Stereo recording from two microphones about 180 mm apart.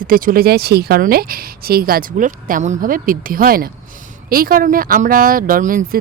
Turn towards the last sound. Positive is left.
turn(degrees=-50)  # may be behind; listen again after turning